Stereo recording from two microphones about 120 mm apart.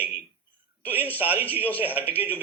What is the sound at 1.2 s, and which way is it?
Speech, 15° right (ahead or behind).